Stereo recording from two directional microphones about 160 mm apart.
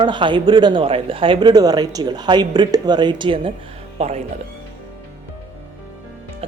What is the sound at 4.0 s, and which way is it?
Speech, 40° right (ahead or behind).